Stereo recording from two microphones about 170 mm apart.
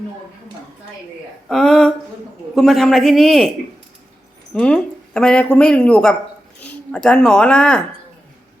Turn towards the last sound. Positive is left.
turn(degrees=5)  # may be behind; listen again after turning